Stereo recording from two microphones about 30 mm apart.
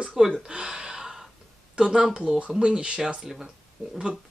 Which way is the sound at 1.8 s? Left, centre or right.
Right.